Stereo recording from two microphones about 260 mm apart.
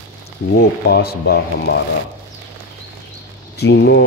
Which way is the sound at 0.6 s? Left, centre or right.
Left.